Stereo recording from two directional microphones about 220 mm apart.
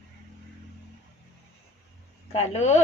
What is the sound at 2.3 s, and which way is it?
Speech, 30° left (ahead or behind).